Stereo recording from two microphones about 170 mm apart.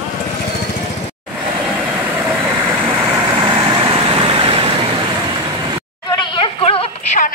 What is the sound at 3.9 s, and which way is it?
Vehicle, 30° right (ahead or behind).